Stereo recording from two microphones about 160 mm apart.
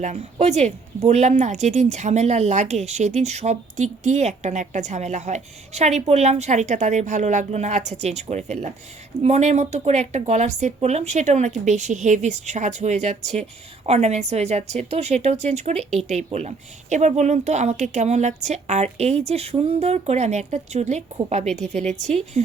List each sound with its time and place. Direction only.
0.0 s speech: 45° right (ahead or behind)